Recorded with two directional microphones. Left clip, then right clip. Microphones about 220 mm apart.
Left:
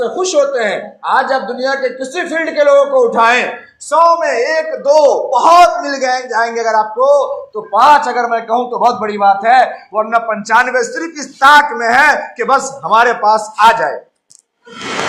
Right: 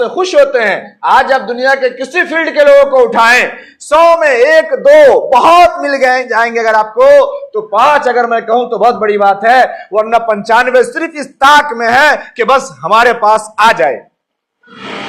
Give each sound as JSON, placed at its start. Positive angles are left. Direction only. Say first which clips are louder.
{"t": 0.0, "sound": "a man's voice", "louder": "right 4 dB", "side_deg": -40}